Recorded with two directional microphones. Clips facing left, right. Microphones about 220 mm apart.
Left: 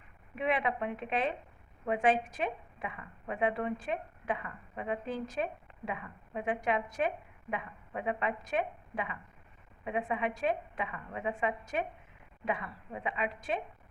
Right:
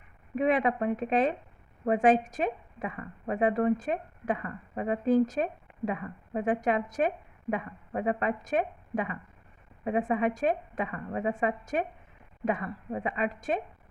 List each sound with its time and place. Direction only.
0.3 s a woman's voice: 45° right (ahead or behind)